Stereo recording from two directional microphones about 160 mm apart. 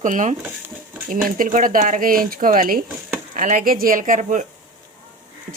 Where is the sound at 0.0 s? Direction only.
50° right (ahead or behind).